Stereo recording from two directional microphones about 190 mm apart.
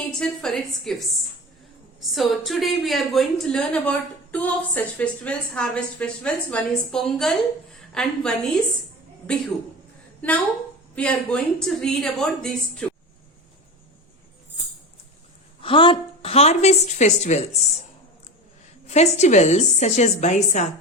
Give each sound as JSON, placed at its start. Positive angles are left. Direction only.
{"t": 0.2, "sound": "a woman's voice", "side_deg": 0}
{"t": 10.9, "sound": "a woman's voice", "side_deg": 5}
{"t": 15.6, "sound": "a woman's voice", "side_deg": 25}
{"t": 18.9, "sound": "a woman's voice", "side_deg": 35}